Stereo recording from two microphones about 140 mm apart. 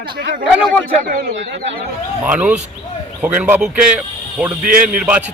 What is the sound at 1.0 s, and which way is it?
Speech, 85° right.